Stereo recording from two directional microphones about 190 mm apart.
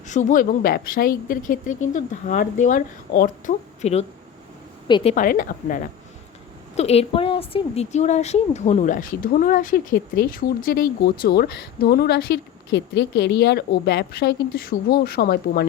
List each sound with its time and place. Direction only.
0.1 s a woman's voice: 40° left (ahead or behind)
4.9 s a woman's voice: 25° left (ahead or behind)
5.1 s a woman's voice: 50° left (ahead or behind)
6.7 s a woman's voice: 35° left (ahead or behind); by 15.6 s 55° left (ahead or behind)